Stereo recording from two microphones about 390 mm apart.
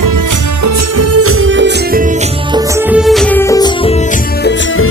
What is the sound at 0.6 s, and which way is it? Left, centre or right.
Music, right.